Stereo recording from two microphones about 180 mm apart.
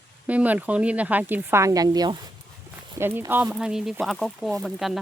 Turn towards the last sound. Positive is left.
turn(degrees=0)  # may be behind; listen again after turning